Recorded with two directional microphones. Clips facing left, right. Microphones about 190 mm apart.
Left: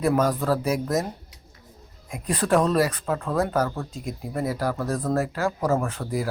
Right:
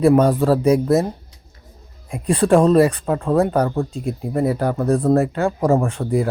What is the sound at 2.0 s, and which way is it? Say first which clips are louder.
Speech: right 7 dB; 30° right (ahead or behind).